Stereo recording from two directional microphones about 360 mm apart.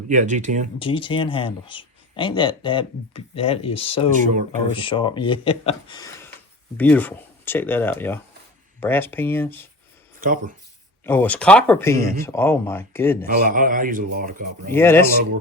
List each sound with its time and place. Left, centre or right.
0.1 s a man's voice: right
0.8 s speech: centre
4.1 s a man's voice: right
4.7 s speech: centre
10.2 s speech: right
11.0 s speech: centre
13.5 s a man's voice: right
14.7 s speech: centre